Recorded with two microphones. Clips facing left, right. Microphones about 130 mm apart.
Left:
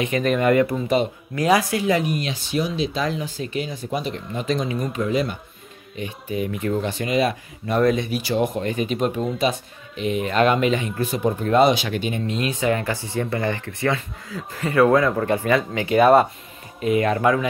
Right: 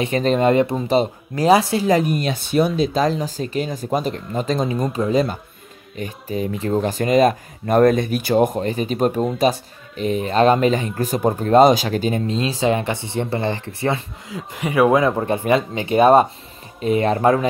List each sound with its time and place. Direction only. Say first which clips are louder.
0.0 s speech: right 3 dB; 30° right (ahead or behind)
14.5 s speech: right 1 dB; 15° right (ahead or behind); by 17.5 s 35° right (ahead or behind)